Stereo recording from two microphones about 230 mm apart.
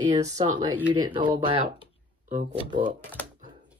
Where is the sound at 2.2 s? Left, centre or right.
Right.